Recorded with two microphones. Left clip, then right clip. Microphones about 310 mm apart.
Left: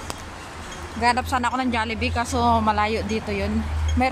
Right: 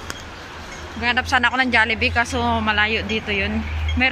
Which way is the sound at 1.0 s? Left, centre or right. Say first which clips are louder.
Right 3 dB; centre.